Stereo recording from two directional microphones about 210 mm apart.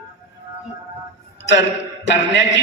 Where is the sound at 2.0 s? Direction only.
55° left (ahead or behind).